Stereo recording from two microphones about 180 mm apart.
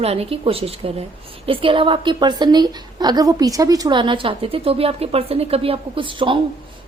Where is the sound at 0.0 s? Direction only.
35° right (ahead or behind).